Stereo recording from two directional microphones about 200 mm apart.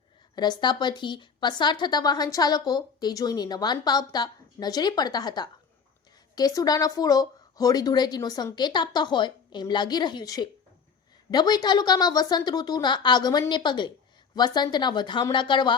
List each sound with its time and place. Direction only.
0.3 s speech: 20° left (ahead or behind)